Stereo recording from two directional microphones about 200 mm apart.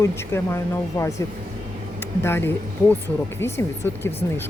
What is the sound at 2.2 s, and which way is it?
Speech, 10° left (ahead or behind).